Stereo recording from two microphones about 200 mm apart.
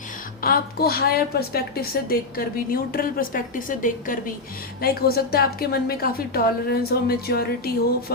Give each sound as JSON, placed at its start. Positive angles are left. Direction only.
{"t": 0.4, "sound": "a woman's voice", "side_deg": 50}